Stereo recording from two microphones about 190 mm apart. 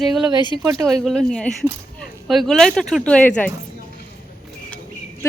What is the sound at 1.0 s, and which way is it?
Speech, 5° left (ahead or behind).